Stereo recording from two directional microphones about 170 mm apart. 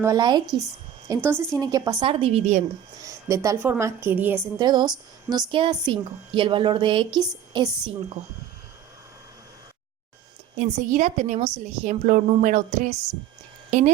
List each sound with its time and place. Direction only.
0.0 s a woman's voice: 20° right (ahead or behind)
2.0 s a woman's voice: 35° right (ahead or behind)
3.0 s a woman's voice: 20° right (ahead or behind)
4.5 s a woman's voice: 25° right (ahead or behind)
10.6 s a woman's voice: 45° right (ahead or behind)